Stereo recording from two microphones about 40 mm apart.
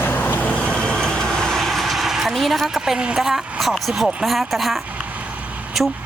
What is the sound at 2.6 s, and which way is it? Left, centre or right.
A woman's voice, centre.